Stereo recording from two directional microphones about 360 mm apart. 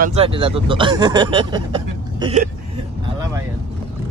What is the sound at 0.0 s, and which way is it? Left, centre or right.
Speech, centre.